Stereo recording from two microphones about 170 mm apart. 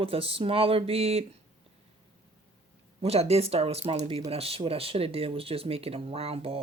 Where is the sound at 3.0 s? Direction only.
35° right (ahead or behind).